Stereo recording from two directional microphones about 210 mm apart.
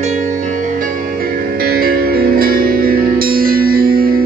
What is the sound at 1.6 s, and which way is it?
Music, 45° right (ahead or behind).